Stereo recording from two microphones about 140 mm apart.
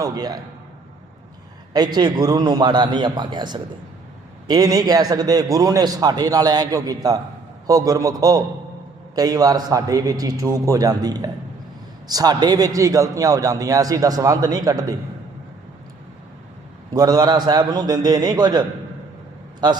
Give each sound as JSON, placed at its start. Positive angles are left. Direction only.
{"t": 0.0, "sound": "a man's voice", "side_deg": -30}
{"t": 2.0, "sound": "a man's voice", "side_deg": -30}
{"t": 16.9, "sound": "a man's voice", "side_deg": -25}